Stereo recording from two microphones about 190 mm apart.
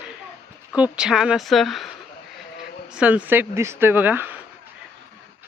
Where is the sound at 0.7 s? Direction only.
5° right (ahead or behind).